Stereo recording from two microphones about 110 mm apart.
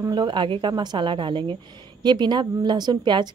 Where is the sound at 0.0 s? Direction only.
40° right (ahead or behind).